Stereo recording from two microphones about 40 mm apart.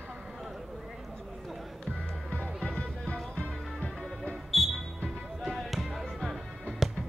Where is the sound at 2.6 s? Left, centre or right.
Left.